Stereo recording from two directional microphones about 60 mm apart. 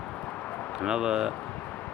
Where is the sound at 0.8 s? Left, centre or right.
Centre.